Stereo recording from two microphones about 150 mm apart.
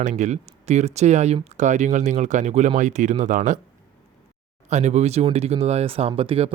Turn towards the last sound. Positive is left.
turn(degrees=-40)  # may be behind; listen again after turning